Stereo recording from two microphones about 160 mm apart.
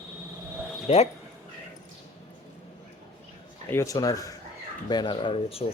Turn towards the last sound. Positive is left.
turn(degrees=35)  # may be behind; listen again after turning